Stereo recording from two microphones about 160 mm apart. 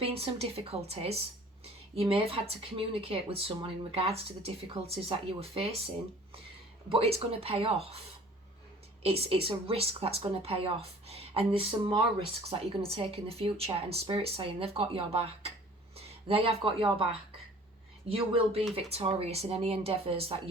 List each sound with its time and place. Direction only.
0.0 s speech: 35° right (ahead or behind)
6.9 s speech: 35° right (ahead or behind)
9.0 s speech: 35° right (ahead or behind)
18.1 s speech: 35° right (ahead or behind)